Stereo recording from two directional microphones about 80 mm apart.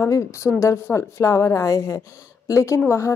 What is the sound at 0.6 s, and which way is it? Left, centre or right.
Speech, left.